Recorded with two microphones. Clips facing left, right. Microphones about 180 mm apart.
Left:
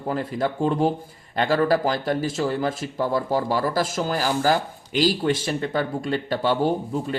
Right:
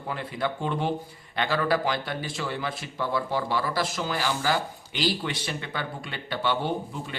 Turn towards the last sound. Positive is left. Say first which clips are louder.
# left 7 dB
turn(degrees=40)  # may be behind; listen again after turning